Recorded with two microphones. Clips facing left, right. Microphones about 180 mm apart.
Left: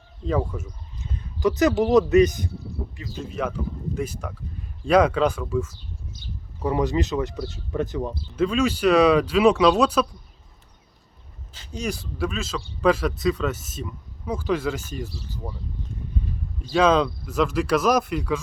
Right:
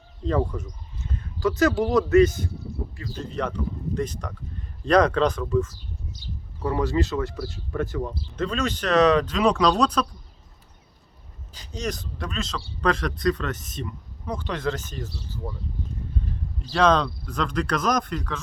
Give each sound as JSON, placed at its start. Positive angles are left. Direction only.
{"t": 0.3, "sound": "speech", "side_deg": 5}
{"t": 1.4, "sound": "speech", "side_deg": 20}
{"t": 3.2, "sound": "speech", "side_deg": 5}
{"t": 8.4, "sound": "speech", "side_deg": 10}
{"t": 11.5, "sound": "speech", "side_deg": -40}
{"t": 11.8, "sound": "speech", "side_deg": 10}
{"t": 16.7, "sound": "speech", "side_deg": 5}